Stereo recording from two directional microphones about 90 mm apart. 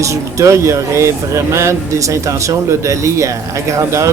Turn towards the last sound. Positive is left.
turn(degrees=-35)  # may be behind; listen again after turning